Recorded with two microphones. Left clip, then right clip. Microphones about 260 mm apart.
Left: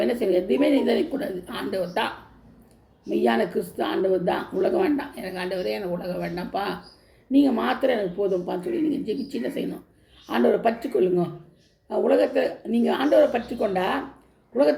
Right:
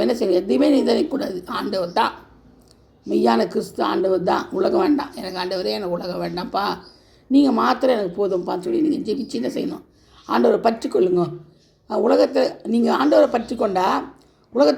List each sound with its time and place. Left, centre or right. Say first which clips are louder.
0.0 s speech: right 3 dB; right